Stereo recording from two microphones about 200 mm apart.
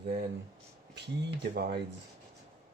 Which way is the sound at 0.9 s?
55° right (ahead or behind).